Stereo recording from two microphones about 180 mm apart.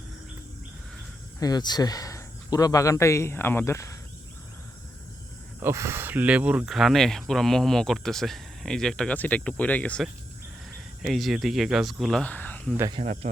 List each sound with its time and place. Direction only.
1.4 s speech: 20° left (ahead or behind)
5.5 s speech: 15° right (ahead or behind); by 12.7 s 10° left (ahead or behind)
12.9 s speech: 35° right (ahead or behind)